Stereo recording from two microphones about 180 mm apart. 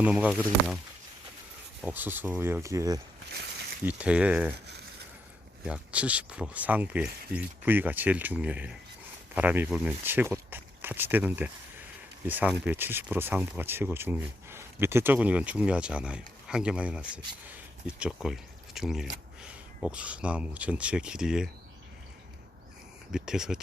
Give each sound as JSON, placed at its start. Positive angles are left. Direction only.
{"t": 0.0, "sound": "speech", "side_deg": -5}
{"t": 1.8, "sound": "speech", "side_deg": -10}
{"t": 3.8, "sound": "speech", "side_deg": -5}
{"t": 4.5, "sound": "speech", "side_deg": -70}
{"t": 5.6, "sound": "speech", "side_deg": -5}
{"t": 23.1, "sound": "speech", "side_deg": -5}